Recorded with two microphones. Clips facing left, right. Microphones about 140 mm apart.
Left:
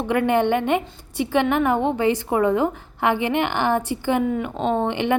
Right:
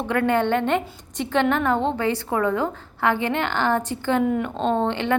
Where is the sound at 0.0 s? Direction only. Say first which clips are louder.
Left 2 dB; 15° left (ahead or behind).